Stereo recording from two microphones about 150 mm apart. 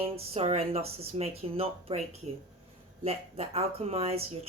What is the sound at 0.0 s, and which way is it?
Speech, 45° right (ahead or behind).